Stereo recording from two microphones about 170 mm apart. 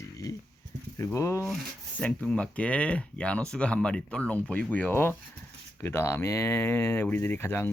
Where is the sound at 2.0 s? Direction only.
5° left (ahead or behind).